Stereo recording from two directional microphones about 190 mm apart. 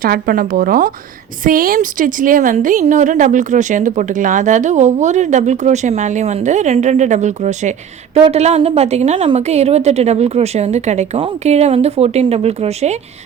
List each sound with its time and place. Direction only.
0.0 s a woman's voice: 50° right (ahead or behind)